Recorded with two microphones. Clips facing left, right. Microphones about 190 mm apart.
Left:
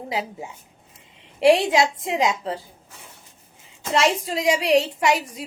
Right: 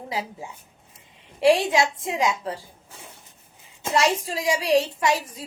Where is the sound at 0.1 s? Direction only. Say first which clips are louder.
Left 2 dB; 20° left (ahead or behind).